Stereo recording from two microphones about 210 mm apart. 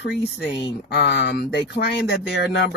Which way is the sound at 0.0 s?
55° left (ahead or behind).